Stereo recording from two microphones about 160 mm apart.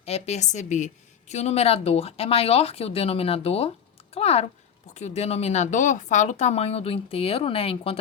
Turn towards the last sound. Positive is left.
turn(degrees=35)  # may be behind; listen again after turning